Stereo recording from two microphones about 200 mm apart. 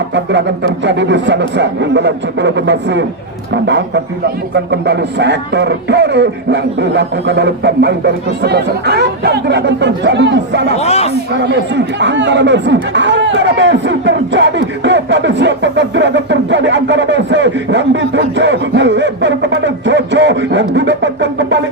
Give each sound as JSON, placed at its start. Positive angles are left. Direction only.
{"t": 0.1, "sound": "speech", "side_deg": -60}
{"t": 10.8, "sound": "speech", "side_deg": 30}
{"t": 11.3, "sound": "speech", "side_deg": -60}